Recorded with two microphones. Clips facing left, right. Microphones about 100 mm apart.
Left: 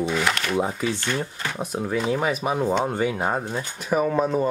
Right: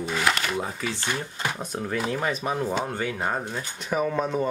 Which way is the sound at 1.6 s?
10° left (ahead or behind).